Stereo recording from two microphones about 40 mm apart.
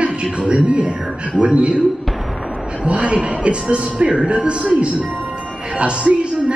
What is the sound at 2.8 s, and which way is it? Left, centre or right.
Speech, right.